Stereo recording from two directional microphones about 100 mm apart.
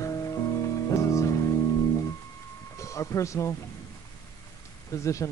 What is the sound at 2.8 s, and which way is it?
Speech, 30° left (ahead or behind).